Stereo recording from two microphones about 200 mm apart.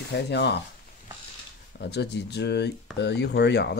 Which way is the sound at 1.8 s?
55° left (ahead or behind).